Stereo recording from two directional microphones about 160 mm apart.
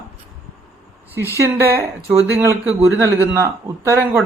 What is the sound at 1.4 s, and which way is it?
Speech, 15° right (ahead or behind).